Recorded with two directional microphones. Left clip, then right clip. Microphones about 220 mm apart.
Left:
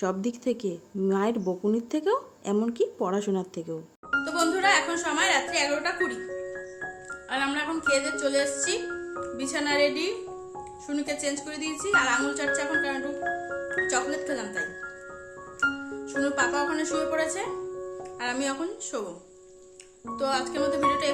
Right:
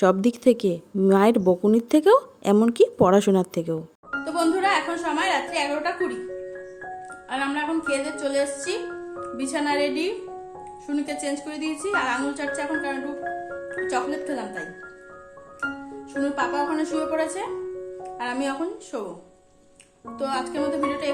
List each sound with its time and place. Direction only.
0.0 s speech: 30° right (ahead or behind)
4.1 s speech: 5° left (ahead or behind)
7.3 s a woman's voice: 10° left (ahead or behind)
20.1 s speech: 5° left (ahead or behind)